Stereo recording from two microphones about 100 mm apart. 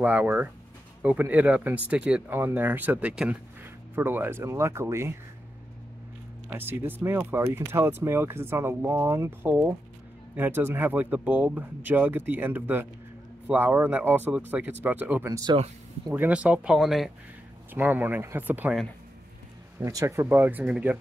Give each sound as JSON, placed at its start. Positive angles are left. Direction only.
{"t": 0.0, "sound": "speech", "side_deg": -15}
{"t": 6.5, "sound": "speech", "side_deg": -20}
{"t": 17.7, "sound": "speech", "side_deg": -20}
{"t": 19.8, "sound": "speech", "side_deg": -35}
{"t": 20.2, "sound": "speech", "side_deg": -20}